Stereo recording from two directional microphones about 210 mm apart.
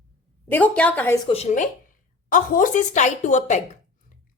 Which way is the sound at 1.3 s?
30° left (ahead or behind).